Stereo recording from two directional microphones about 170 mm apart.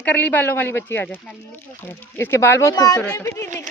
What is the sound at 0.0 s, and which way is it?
Speech, 10° left (ahead or behind).